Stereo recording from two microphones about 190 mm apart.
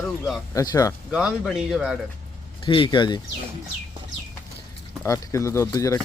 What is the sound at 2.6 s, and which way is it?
Speech, 25° left (ahead or behind).